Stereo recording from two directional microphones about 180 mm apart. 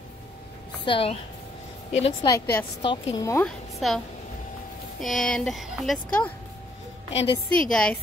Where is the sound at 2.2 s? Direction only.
15° left (ahead or behind).